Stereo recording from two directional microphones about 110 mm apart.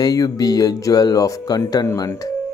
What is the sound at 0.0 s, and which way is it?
Speech, 35° left (ahead or behind).